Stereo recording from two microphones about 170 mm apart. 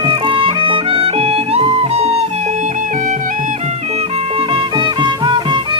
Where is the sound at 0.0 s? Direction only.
30° right (ahead or behind).